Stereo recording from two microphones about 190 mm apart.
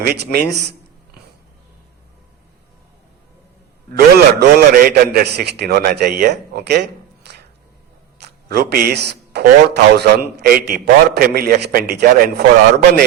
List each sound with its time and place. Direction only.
0.0 s a man's voice: 55° right (ahead or behind)
3.9 s a man's voice: 60° right (ahead or behind)